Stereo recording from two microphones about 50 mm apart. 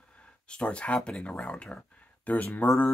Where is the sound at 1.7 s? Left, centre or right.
Left.